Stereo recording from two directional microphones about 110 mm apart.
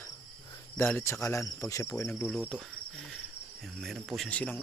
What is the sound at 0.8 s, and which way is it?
Speech, 15° left (ahead or behind).